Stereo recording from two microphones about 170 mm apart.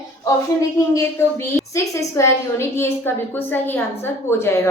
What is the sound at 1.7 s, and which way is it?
A woman's voice, 15° left (ahead or behind).